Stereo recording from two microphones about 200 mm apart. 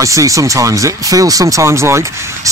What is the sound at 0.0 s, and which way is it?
Speech, 15° right (ahead or behind).